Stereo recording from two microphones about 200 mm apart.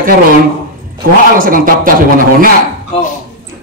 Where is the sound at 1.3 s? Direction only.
45° right (ahead or behind).